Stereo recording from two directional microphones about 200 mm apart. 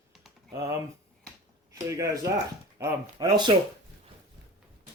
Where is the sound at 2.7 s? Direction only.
15° right (ahead or behind).